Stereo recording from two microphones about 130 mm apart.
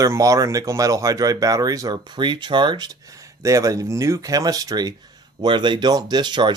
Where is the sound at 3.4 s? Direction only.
25° right (ahead or behind).